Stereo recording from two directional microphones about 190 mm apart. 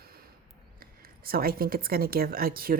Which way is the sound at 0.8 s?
50° right (ahead or behind).